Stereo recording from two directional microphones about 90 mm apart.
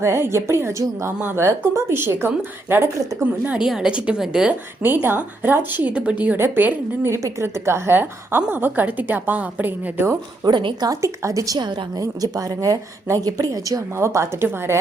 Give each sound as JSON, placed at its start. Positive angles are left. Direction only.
{"t": 0.0, "sound": "a woman's voice", "side_deg": -30}
{"t": 3.5, "sound": "a woman's voice", "side_deg": -5}
{"t": 4.8, "sound": "a woman's voice", "side_deg": -25}
{"t": 10.4, "sound": "a woman's voice", "side_deg": -65}
{"t": 10.8, "sound": "a woman's voice", "side_deg": -40}